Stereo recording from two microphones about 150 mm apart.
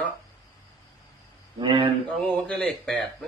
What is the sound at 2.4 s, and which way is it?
Speech, 10° left (ahead or behind).